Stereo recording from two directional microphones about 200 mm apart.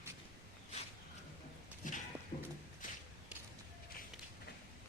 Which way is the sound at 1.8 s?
40° left (ahead or behind).